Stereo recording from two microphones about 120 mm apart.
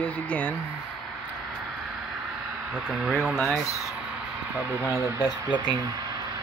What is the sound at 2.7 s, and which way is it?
Speech, 5° right (ahead or behind).